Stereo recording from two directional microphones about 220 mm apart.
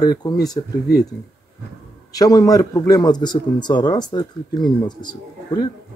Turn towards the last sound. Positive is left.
turn(degrees=20)  # may be behind; listen again after turning